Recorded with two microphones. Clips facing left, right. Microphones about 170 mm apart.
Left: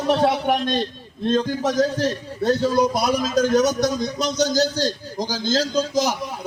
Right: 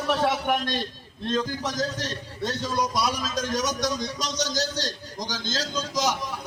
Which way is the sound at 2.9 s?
55° left (ahead or behind).